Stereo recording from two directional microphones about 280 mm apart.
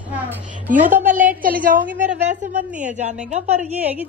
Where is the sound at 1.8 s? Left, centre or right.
Centre.